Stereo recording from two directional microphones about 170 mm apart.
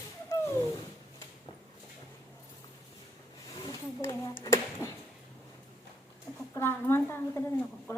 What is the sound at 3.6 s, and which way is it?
Speech, 15° left (ahead or behind).